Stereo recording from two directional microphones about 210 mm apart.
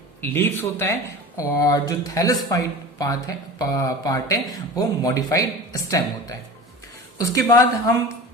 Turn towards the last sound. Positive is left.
turn(degrees=15)  # may be behind; listen again after turning